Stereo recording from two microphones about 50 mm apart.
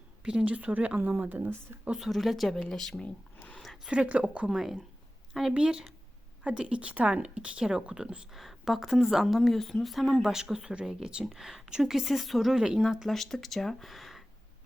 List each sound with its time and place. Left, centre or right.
0.3 s a woman's voice: right
2.0 s a woman's voice: centre
3.8 s a woman's voice: right
4.5 s a woman's voice: centre
5.5 s a woman's voice: centre
7.6 s a woman's voice: centre
8.3 s a woman's voice: centre
12.5 s speech: centre
13.1 s a woman's voice: centre